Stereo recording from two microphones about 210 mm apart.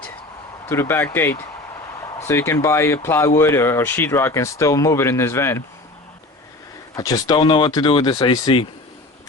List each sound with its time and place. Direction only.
0.6 s speech: 10° left (ahead or behind)
6.9 s speech: 15° left (ahead or behind)